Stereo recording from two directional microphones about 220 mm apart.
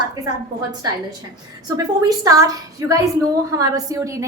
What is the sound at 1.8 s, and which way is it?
A woman's voice, 15° right (ahead or behind).